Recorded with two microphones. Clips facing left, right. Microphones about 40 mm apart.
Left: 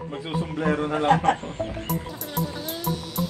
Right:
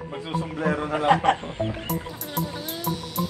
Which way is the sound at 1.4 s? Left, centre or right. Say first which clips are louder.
Right 2 dB; centre.